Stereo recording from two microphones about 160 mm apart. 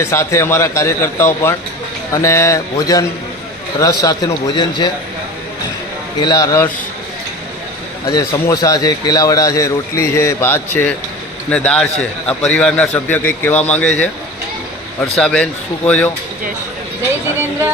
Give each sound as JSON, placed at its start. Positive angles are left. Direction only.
{"t": 0.0, "sound": "a man's voice", "side_deg": 15}
{"t": 6.1, "sound": "a man's voice", "side_deg": 25}
{"t": 8.3, "sound": "a man's voice", "side_deg": 20}
{"t": 15.1, "sound": "a man's voice", "side_deg": 5}